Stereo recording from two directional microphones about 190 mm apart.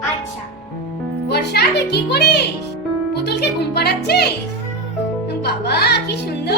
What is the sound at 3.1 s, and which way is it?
Music, 60° left (ahead or behind).